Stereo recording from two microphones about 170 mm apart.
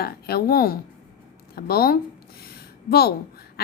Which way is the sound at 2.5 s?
65° left (ahead or behind).